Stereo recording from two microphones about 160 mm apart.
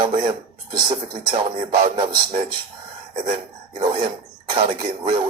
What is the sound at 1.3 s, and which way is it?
Speech, 30° right (ahead or behind).